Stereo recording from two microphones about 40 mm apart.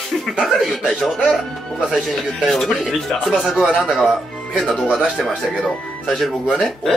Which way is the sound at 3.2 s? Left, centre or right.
Centre.